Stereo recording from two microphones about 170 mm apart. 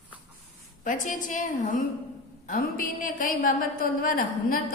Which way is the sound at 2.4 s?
55° left (ahead or behind).